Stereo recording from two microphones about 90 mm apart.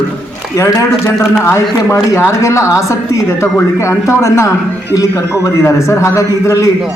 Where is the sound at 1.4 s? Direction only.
35° left (ahead or behind).